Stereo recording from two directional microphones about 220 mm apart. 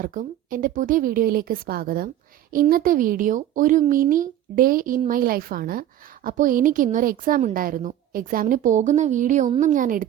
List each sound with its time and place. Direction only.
0.0 s a woman's voice: 40° right (ahead or behind)